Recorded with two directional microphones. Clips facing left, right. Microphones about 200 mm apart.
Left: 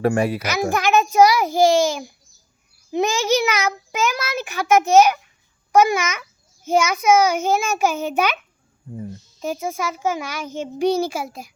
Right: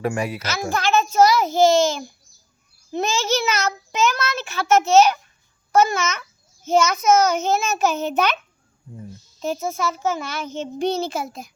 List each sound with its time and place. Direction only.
0.0 s a child's voice: 35° left (ahead or behind)
0.3 s a child's voice: 15° left (ahead or behind)
9.4 s a child's voice: 10° left (ahead or behind)